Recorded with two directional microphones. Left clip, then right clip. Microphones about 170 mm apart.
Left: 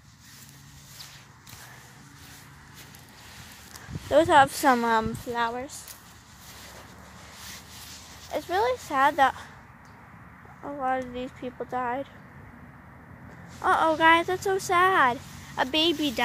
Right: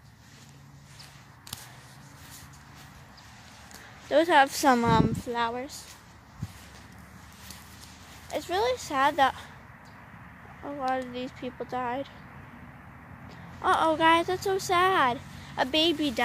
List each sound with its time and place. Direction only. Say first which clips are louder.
4.1 s speech: left 2 dB; centre (ahead or behind)
4.6 s speech: left 1 dB; 15° right (ahead or behind)
4.9 s speech: even; centre (ahead or behind)
8.3 s speech: left 2 dB; 10° left (ahead or behind)
10.6 s speech: left 2 dB; centre (ahead or behind)
13.6 s speech: left 2 dB; 5° right (ahead or behind)